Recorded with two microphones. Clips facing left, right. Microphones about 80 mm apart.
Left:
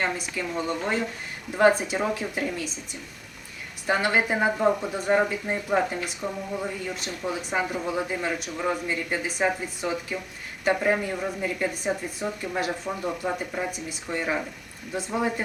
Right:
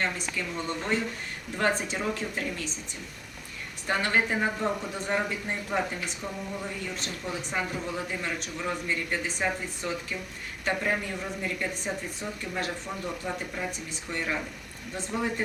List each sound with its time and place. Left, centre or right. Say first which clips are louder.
0.0 s speech: left 3 dB; centre
3.8 s speech: left 3 dB; centre; by 6.4 s left
6.9 s speech: left 4 dB; centre
10.9 s speech: left 5 dB; left
11.4 s speech: left 5 dB; centre
13.1 s speech: left 5 dB; left
13.7 s speech: left 4 dB; centre